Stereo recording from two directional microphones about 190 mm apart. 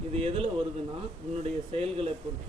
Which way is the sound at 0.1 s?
30° right (ahead or behind).